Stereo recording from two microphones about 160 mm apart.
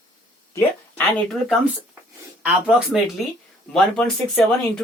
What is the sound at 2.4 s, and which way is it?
Speech, centre (ahead or behind).